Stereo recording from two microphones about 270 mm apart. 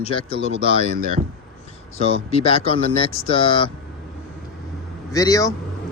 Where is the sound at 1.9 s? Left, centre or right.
Left.